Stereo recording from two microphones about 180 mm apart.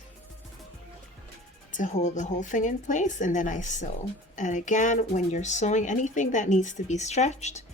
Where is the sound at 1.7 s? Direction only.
40° left (ahead or behind).